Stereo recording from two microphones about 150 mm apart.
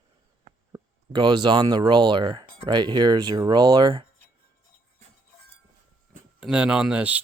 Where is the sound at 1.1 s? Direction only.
30° right (ahead or behind).